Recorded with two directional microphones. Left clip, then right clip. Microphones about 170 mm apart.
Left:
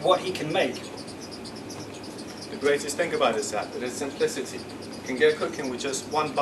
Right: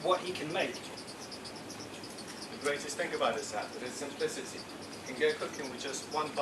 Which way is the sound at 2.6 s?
15° left (ahead or behind).